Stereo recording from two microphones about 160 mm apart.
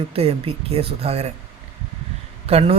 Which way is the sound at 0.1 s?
40° right (ahead or behind).